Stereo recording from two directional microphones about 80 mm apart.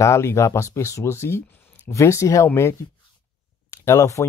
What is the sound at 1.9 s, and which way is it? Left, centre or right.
Speech, left.